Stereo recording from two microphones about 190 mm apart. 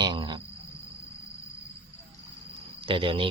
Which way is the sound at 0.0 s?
25° right (ahead or behind).